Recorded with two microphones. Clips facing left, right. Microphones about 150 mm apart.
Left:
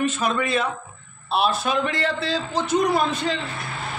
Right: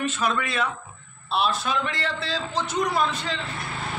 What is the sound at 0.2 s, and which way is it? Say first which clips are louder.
Speech: left 3 dB; 40° left (ahead or behind).